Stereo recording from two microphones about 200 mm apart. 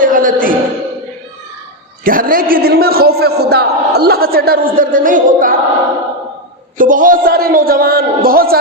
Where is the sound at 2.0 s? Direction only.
45° right (ahead or behind).